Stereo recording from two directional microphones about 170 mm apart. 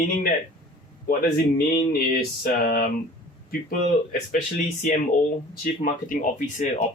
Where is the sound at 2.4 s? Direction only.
60° left (ahead or behind).